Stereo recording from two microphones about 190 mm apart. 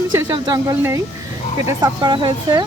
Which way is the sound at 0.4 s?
20° right (ahead or behind).